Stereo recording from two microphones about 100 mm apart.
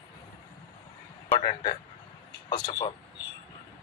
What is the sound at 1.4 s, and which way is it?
Speech, 55° left (ahead or behind).